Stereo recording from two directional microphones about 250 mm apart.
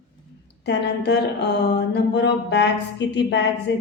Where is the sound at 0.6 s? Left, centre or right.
Left.